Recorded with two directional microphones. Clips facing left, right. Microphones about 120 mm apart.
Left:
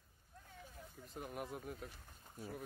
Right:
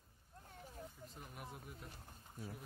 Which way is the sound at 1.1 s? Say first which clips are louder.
Left 7 dB; 50° left (ahead or behind).